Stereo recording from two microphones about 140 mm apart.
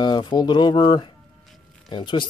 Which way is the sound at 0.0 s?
30° left (ahead or behind).